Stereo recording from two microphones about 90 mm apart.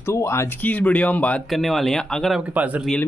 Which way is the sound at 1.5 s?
Centre (ahead or behind).